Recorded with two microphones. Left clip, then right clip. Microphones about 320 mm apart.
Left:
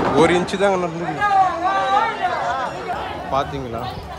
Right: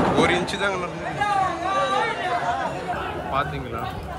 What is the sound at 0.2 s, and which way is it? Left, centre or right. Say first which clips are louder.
Speech: left 5 dB; centre.